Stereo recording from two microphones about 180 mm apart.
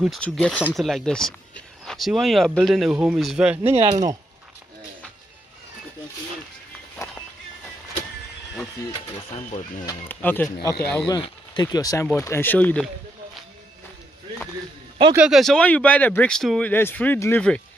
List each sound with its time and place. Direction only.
0.0 s speech: centre (ahead or behind)
3.7 s speech: 35° right (ahead or behind)
10.0 s speech: 10° left (ahead or behind)
11.1 s speech: 25° left (ahead or behind); by 12.9 s 5° left (ahead or behind)
15.1 s speech: 5° right (ahead or behind)